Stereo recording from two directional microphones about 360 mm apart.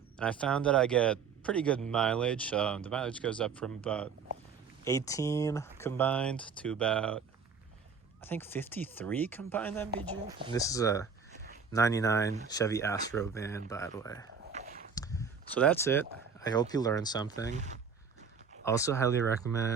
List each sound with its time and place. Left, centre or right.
0.2 s speech: centre
10.2 s speech: centre
10.5 s speech: centre
14.5 s a sound: right
14.9 s speech: centre
17.5 s speech: centre
18.6 s speech: centre